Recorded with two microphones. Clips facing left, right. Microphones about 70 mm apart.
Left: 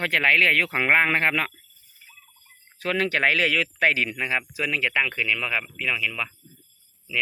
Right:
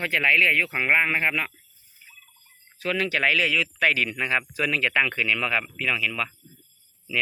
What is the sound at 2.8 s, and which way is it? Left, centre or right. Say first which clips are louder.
Speech: left 1 dB; left.